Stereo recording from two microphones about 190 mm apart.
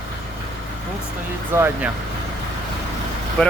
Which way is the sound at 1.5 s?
15° right (ahead or behind).